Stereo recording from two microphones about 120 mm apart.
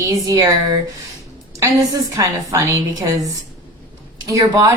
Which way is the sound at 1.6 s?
30° right (ahead or behind).